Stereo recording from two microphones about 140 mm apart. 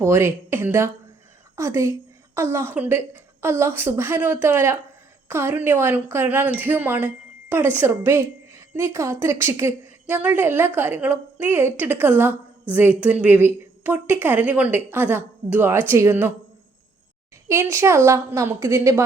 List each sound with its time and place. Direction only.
0.0 s a woman's voice: 20° right (ahead or behind)
17.5 s a woman's voice: 20° right (ahead or behind)